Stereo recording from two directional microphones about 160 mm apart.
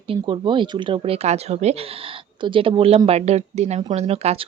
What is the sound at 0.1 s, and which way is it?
A woman's voice, 30° right (ahead or behind).